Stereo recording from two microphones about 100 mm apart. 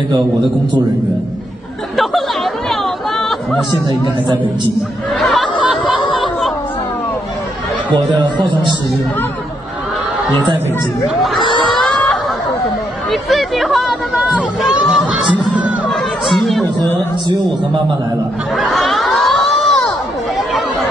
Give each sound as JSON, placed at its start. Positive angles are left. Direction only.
{"t": 2.0, "sound": "chatter", "side_deg": 0}
{"t": 5.1, "sound": "chatter", "side_deg": 5}
{"t": 7.9, "sound": "speech", "side_deg": -50}
{"t": 11.2, "sound": "a sound", "side_deg": 0}
{"t": 13.1, "sound": "chatter", "side_deg": 0}
{"t": 14.1, "sound": "a sound", "side_deg": -10}
{"t": 15.9, "sound": "chatter", "side_deg": 0}
{"t": 18.6, "sound": "crowd", "side_deg": 0}